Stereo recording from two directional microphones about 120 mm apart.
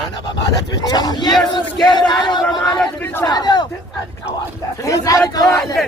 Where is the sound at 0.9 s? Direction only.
35° left (ahead or behind).